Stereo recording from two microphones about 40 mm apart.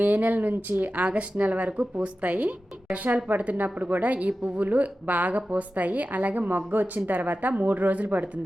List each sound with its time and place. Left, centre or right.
0.0 s speech: right